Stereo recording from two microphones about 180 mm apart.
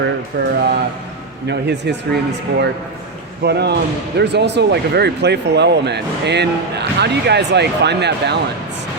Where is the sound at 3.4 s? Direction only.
65° right (ahead or behind).